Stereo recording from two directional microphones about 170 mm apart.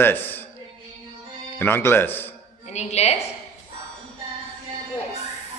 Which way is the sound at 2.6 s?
40° left (ahead or behind).